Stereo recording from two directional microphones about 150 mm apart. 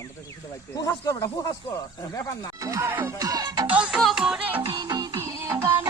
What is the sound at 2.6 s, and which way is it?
Music, 20° right (ahead or behind).